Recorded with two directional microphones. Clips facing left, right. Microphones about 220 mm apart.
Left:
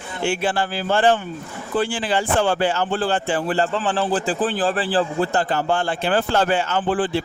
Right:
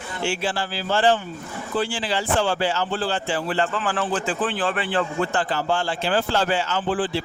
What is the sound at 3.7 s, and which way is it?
A man's voice, 30° left (ahead or behind).